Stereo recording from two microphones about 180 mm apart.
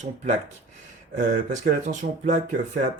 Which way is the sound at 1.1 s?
50° right (ahead or behind).